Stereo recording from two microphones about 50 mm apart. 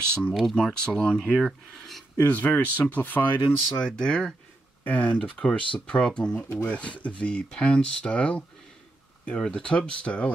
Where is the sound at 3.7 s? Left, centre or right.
Centre.